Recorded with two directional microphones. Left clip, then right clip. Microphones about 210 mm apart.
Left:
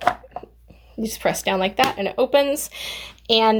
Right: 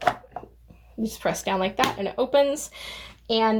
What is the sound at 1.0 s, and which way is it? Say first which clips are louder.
Speech: left 4 dB; 30° left (ahead or behind).